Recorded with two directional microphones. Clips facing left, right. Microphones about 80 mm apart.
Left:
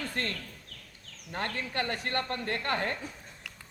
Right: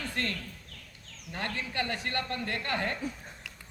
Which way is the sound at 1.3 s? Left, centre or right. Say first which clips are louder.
Left 1 dB; left.